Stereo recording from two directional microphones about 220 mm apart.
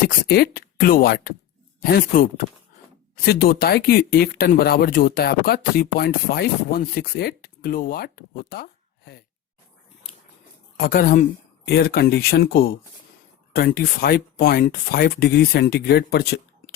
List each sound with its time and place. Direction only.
0.3 s speech: 40° left (ahead or behind)
3.2 s speech: 45° left (ahead or behind)
10.8 s speech: 40° left (ahead or behind)